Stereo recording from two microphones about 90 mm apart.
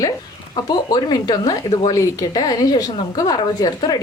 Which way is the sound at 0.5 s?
55° left (ahead or behind).